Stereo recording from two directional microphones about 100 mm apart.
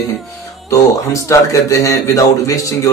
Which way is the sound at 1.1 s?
30° left (ahead or behind).